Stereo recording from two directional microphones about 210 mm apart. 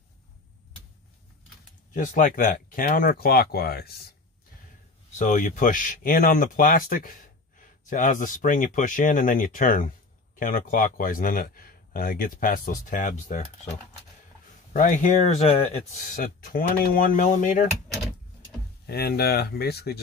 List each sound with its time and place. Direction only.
2.0 s speech: 40° left (ahead or behind)
5.1 s speech: 35° left (ahead or behind)
14.7 s speech: 40° left (ahead or behind)
15.9 s speech: 40° left (ahead or behind)
18.9 s speech: 50° left (ahead or behind)